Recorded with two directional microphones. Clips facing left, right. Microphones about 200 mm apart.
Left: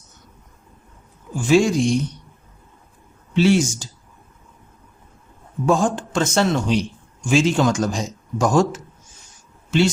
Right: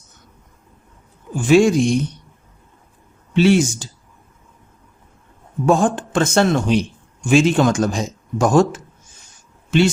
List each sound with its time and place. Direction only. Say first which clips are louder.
1.4 s speech: right 3 dB; 55° right (ahead or behind)
3.3 s speech: right 2 dB; 60° right (ahead or behind)
5.6 s speech: right 3 dB; 60° right (ahead or behind)